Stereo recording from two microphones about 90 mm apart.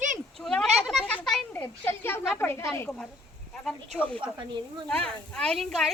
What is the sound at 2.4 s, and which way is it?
Speech, 25° left (ahead or behind).